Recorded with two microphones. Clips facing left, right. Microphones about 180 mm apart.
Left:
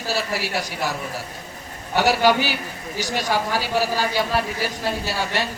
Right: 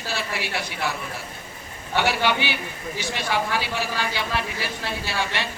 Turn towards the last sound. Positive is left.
turn(degrees=40)  # may be behind; listen again after turning